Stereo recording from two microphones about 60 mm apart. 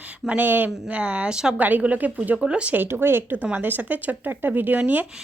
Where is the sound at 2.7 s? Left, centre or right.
Right.